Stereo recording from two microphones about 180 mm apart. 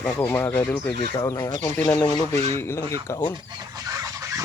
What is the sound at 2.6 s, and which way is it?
Speech, 15° left (ahead or behind).